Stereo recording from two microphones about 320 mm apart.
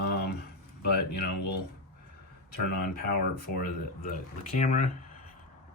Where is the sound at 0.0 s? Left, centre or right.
Left.